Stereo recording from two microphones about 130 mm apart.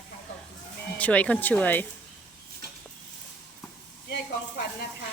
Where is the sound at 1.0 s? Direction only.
10° left (ahead or behind).